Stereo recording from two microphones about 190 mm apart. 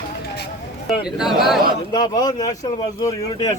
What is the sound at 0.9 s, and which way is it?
Speech, centre (ahead or behind).